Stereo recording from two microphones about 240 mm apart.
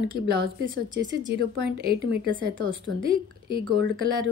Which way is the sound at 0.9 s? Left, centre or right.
Right.